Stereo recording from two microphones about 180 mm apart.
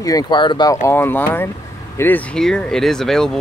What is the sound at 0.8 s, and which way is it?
Speech, 10° left (ahead or behind).